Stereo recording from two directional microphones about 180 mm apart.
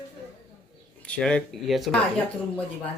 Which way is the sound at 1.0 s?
5° left (ahead or behind).